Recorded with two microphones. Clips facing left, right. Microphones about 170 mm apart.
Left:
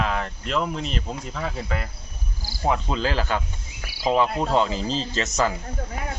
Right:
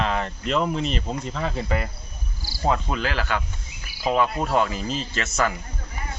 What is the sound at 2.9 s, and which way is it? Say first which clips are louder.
Speech: left 1 dB; 25° left (ahead or behind).